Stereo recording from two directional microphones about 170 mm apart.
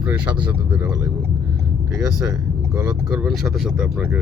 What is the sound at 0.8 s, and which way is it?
Speech, 20° right (ahead or behind).